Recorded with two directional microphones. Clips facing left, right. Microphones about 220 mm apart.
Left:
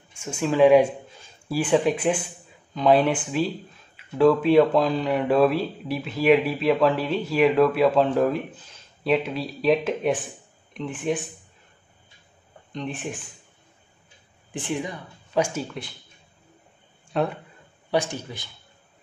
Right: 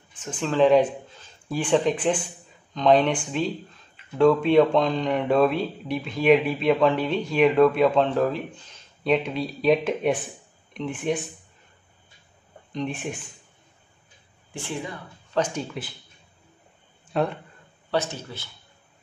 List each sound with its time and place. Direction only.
0.1 s speech: 10° left (ahead or behind)
12.7 s speech: centre (ahead or behind)
14.5 s speech: 20° left (ahead or behind)
17.1 s speech: centre (ahead or behind)
17.9 s speech: 15° left (ahead or behind)